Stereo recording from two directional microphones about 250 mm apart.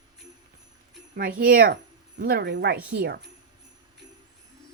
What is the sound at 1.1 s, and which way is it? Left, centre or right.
Speech, right.